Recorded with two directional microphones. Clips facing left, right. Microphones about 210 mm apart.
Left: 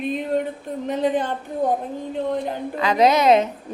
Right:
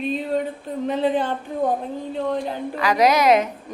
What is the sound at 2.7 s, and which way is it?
Speech, 25° left (ahead or behind).